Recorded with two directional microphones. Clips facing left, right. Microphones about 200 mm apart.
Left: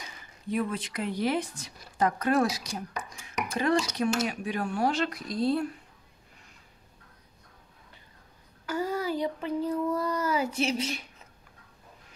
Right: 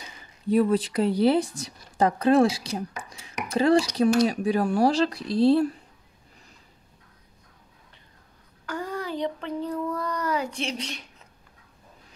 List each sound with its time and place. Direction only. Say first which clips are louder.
0.5 s speech: right 9 dB; 35° right (ahead or behind)
3.3 s cough: right 6 dB; 30° right (ahead or behind)
3.9 s speech: right 7 dB; 35° right (ahead or behind)
8.6 s speech: left 2 dB; 5° left (ahead or behind)